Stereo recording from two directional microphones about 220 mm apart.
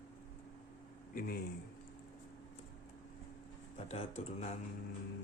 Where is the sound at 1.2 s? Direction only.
40° left (ahead or behind).